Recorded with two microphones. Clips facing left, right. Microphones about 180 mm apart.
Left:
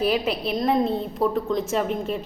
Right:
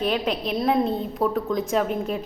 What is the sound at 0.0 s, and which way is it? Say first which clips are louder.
A woman's voice: left 1 dB; 5° left (ahead or behind).